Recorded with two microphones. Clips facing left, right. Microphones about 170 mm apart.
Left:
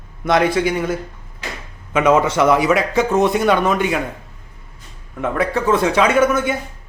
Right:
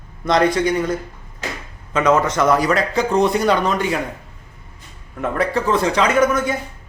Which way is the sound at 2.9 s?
20° left (ahead or behind).